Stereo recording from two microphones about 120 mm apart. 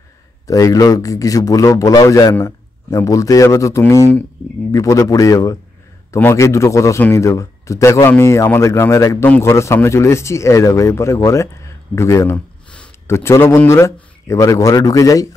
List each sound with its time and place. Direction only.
0.5 s speech: 30° left (ahead or behind)